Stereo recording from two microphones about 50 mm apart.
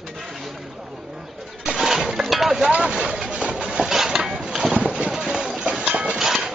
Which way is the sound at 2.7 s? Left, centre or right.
Centre.